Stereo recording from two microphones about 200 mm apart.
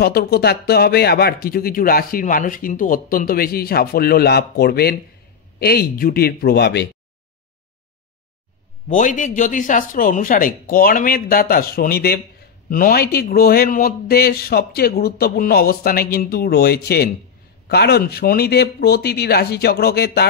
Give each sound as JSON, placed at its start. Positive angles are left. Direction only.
{"t": 0.0, "sound": "speech", "side_deg": 50}
{"t": 8.8, "sound": "speech", "side_deg": 40}